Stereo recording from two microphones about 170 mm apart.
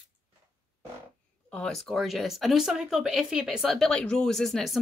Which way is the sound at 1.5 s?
5° left (ahead or behind).